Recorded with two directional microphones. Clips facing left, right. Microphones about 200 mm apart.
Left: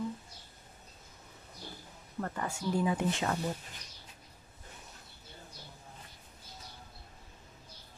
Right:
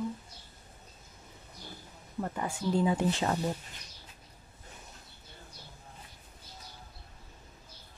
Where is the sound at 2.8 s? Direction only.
30° right (ahead or behind).